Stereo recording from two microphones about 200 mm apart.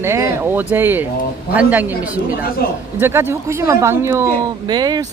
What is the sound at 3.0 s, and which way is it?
Speech, 10° right (ahead or behind).